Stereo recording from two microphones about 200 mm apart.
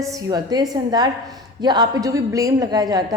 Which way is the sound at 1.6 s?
20° right (ahead or behind).